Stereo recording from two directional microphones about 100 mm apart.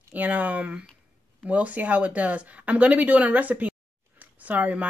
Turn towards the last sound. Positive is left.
turn(degrees=-15)  # may be behind; listen again after turning